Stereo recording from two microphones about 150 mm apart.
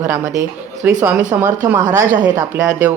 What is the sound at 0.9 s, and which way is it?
A woman's voice, 10° right (ahead or behind).